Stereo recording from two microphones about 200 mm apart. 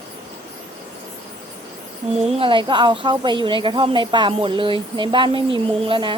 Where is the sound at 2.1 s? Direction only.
30° right (ahead or behind).